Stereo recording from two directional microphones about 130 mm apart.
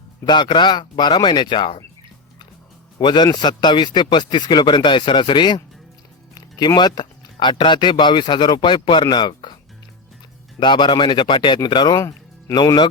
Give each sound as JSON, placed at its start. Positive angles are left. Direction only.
{"t": 0.3, "sound": "speech", "side_deg": 35}
{"t": 3.0, "sound": "speech", "side_deg": 35}
{"t": 10.6, "sound": "speech", "side_deg": 35}